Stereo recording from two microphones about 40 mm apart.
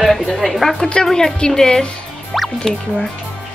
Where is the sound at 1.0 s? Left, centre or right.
Centre.